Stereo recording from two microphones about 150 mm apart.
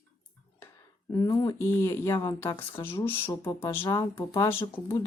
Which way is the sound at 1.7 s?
15° left (ahead or behind).